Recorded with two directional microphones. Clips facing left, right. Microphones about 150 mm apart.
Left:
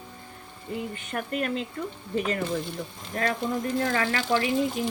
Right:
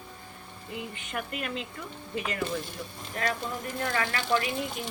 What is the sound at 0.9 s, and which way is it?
Speech, 40° left (ahead or behind).